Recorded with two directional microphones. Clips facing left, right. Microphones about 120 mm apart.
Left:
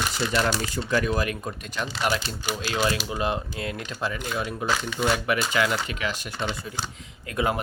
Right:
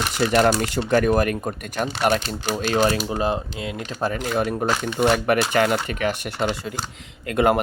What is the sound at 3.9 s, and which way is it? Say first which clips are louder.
Speech: right 8 dB; 45° right (ahead or behind).